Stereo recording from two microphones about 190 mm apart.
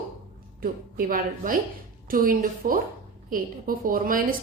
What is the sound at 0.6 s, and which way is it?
A woman's voice, 50° right (ahead or behind).